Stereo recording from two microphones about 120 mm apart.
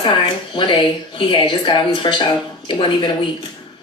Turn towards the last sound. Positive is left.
turn(degrees=40)  # may be behind; listen again after turning